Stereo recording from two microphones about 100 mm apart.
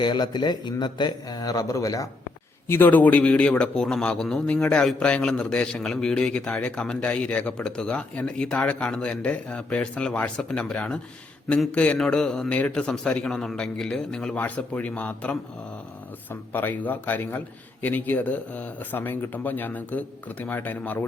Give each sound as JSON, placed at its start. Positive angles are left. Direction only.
{"t": 0.0, "sound": "speech", "side_deg": 50}
{"t": 2.6, "sound": "a man's voice", "side_deg": 20}